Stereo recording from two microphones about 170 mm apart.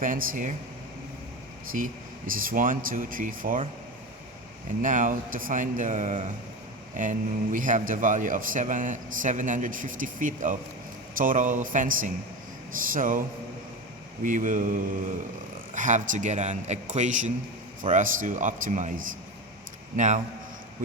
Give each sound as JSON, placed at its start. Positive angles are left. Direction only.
{"t": 0.0, "sound": "a man's voice", "side_deg": -50}
{"t": 1.7, "sound": "a man's voice", "side_deg": -55}
{"t": 4.8, "sound": "a man's voice", "side_deg": -50}